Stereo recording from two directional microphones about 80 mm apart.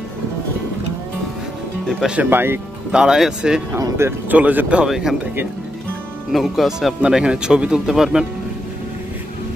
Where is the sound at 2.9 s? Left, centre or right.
Centre.